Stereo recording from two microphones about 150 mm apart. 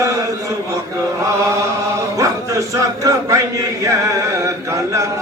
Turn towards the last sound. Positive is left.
turn(degrees=-20)  # may be behind; listen again after turning